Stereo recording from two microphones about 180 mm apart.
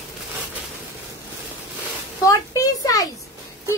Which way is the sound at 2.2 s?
15° left (ahead or behind).